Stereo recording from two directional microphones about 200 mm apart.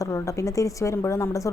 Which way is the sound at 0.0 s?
15° left (ahead or behind).